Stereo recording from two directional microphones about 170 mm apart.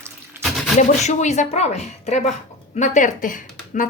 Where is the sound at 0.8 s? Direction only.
45° left (ahead or behind).